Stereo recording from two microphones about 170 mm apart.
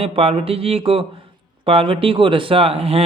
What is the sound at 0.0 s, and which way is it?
Speech, 35° right (ahead or behind).